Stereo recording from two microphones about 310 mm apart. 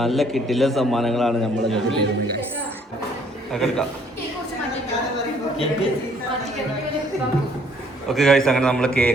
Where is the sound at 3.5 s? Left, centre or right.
Centre.